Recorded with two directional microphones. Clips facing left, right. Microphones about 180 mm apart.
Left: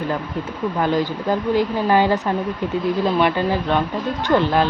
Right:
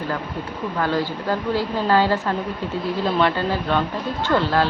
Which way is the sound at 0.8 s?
20° left (ahead or behind).